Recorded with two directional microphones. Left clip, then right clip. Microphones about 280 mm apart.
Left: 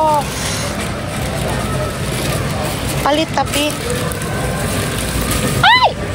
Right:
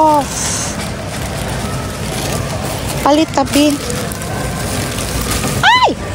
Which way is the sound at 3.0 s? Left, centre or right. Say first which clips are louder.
Right 4 dB; right.